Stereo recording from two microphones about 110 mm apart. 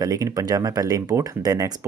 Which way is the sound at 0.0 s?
35° right (ahead or behind).